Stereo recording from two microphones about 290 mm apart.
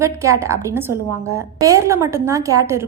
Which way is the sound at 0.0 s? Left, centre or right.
Centre.